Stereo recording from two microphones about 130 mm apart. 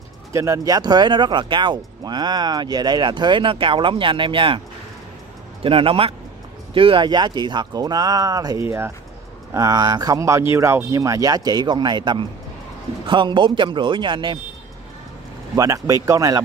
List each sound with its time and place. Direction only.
0.3 s speech: 25° right (ahead or behind); by 4.6 s 40° right (ahead or behind)
5.6 s a man's voice: 45° right (ahead or behind); by 8.6 s 30° right (ahead or behind)
8.6 s speech: 20° right (ahead or behind); by 14.4 s 35° right (ahead or behind)
15.5 s speech: 25° right (ahead or behind)